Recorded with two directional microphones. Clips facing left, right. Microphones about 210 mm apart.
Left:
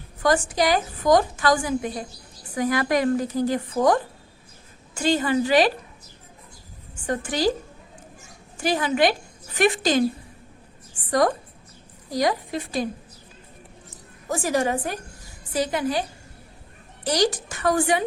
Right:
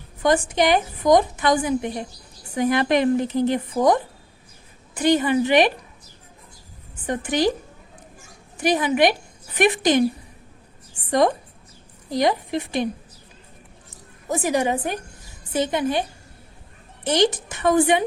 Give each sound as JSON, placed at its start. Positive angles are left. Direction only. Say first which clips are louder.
{"t": 0.2, "sound": "a woman's voice", "louder": "right 2 dB", "side_deg": -20}
{"t": 7.1, "sound": "a woman's voice", "louder": "right 2 dB", "side_deg": -20}
{"t": 8.5, "sound": "a woman's voice", "louder": "right 3 dB", "side_deg": -20}
{"t": 11.1, "sound": "a woman's voice", "louder": "right 2 dB", "side_deg": -20}
{"t": 14.3, "sound": "a woman's voice", "louder": "right 2 dB", "side_deg": -20}